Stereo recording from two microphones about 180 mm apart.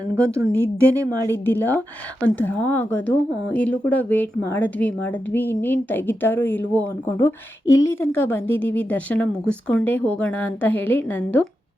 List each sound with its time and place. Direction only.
0.2 s speech: 15° right (ahead or behind)
1.3 s a woman's voice: 10° left (ahead or behind)